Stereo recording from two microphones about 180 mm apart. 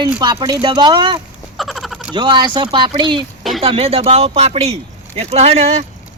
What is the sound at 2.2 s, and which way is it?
Speech, 25° right (ahead or behind).